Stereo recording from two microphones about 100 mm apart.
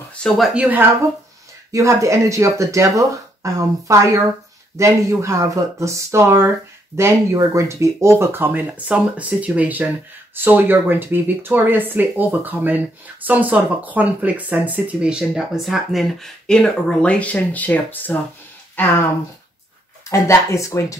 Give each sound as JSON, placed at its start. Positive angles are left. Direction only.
{"t": 0.2, "sound": "speech", "side_deg": 5}
{"t": 0.6, "sound": "speech", "side_deg": -15}
{"t": 1.7, "sound": "speech", "side_deg": -30}
{"t": 20.1, "sound": "speech", "side_deg": 30}